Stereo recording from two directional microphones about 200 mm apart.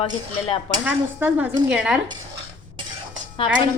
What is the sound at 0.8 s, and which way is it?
Speech, 10° right (ahead or behind).